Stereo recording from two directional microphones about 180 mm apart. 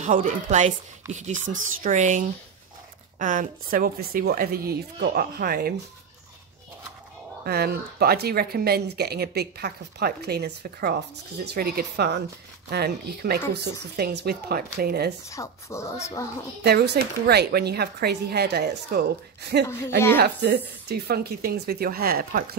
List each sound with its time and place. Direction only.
0.0 s a woman's voice: 45° right (ahead or behind)
7.4 s speech: 60° right (ahead or behind)
15.2 s speech: 15° left (ahead or behind)
16.6 s speech: 65° right (ahead or behind)
20.2 s speech: 60° right (ahead or behind)